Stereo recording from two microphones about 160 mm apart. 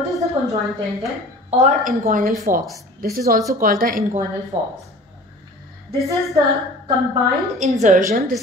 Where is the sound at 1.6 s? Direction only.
50° right (ahead or behind).